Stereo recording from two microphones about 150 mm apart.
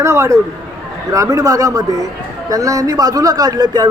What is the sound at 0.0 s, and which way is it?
A man's voice, 20° right (ahead or behind).